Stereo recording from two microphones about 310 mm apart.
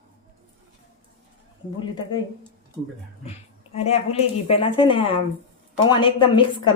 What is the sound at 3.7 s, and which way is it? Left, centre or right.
A woman's voice, centre.